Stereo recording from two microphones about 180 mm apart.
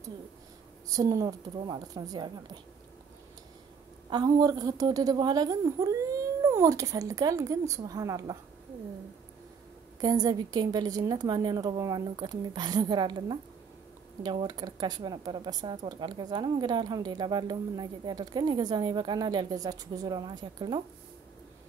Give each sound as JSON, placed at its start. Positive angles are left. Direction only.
{"t": 0.8, "sound": "speech", "side_deg": -20}
{"t": 4.1, "sound": "speech", "side_deg": -20}
{"t": 9.9, "sound": "speech", "side_deg": -20}